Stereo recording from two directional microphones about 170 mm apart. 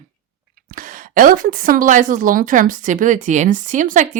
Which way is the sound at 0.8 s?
55° right (ahead or behind).